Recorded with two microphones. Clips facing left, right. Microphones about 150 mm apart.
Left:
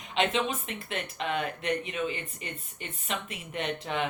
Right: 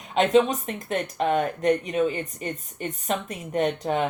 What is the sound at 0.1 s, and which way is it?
Speech, 40° right (ahead or behind).